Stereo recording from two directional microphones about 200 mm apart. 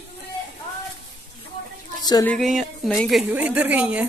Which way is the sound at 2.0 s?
20° left (ahead or behind).